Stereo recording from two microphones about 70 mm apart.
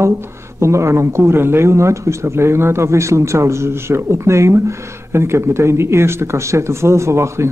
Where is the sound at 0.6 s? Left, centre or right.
Right.